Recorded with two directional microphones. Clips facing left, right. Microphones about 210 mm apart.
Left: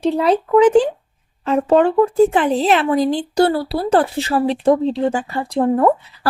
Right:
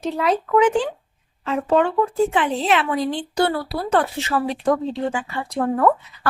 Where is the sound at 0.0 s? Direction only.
30° left (ahead or behind).